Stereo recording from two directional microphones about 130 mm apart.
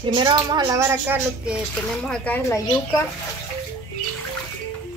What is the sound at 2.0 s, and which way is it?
Speech, 10° left (ahead or behind).